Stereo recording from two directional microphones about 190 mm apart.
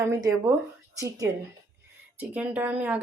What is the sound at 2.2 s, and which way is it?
Speech, 10° right (ahead or behind).